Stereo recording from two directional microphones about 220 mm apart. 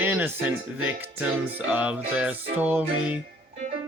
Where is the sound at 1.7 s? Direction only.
5° right (ahead or behind).